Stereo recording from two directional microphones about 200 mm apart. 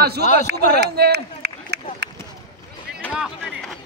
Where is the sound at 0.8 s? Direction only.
55° right (ahead or behind).